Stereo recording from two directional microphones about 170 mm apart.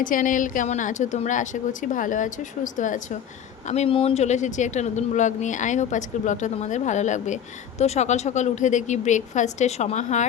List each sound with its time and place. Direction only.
0.0 s speech: 50° left (ahead or behind)
3.7 s speech: 35° left (ahead or behind)